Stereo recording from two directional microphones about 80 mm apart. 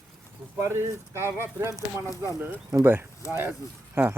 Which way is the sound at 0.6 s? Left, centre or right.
Right.